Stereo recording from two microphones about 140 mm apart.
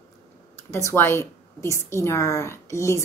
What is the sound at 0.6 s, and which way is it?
A woman's voice, 20° left (ahead or behind).